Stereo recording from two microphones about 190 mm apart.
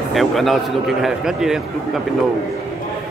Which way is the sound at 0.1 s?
Centre (ahead or behind).